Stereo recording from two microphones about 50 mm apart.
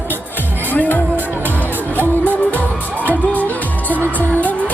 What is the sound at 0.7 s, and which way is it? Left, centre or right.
Music, left.